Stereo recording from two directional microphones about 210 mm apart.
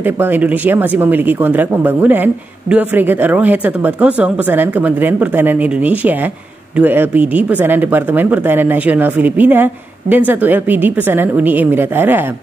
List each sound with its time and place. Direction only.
0.0 s speech: 10° right (ahead or behind)